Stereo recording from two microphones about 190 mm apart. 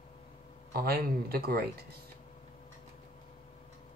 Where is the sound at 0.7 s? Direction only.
55° right (ahead or behind).